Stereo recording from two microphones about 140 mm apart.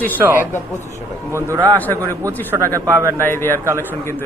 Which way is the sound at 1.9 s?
15° left (ahead or behind).